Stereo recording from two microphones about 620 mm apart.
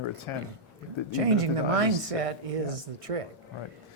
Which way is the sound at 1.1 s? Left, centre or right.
Right.